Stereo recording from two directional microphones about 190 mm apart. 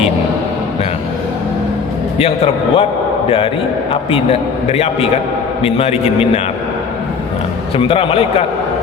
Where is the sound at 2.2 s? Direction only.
30° left (ahead or behind).